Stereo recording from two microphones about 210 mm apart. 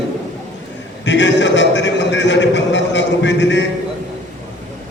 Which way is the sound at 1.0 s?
60° left (ahead or behind).